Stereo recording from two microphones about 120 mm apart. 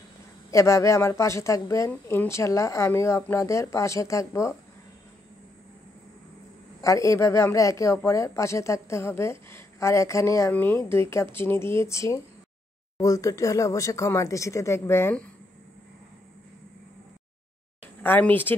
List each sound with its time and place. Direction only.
0.5 s a woman's voice: 25° left (ahead or behind)
6.8 s a woman's voice: 25° left (ahead or behind)
18.0 s speech: 15° left (ahead or behind)